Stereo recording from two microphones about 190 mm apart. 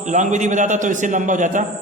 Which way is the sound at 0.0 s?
40° right (ahead or behind).